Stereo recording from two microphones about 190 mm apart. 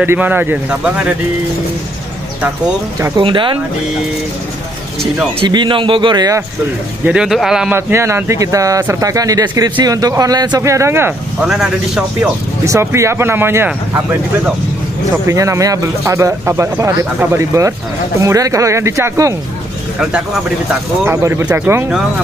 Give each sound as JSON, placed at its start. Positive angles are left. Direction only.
{"t": 0.0, "sound": "a man's voice", "side_deg": -10}
{"t": 3.0, "sound": "a man's voice", "side_deg": -25}
{"t": 5.5, "sound": "a man's voice", "side_deg": -25}
{"t": 7.1, "sound": "a man's voice", "side_deg": -5}
{"t": 12.6, "sound": "a man's voice", "side_deg": -15}
{"t": 20.0, "sound": "a man's voice", "side_deg": -5}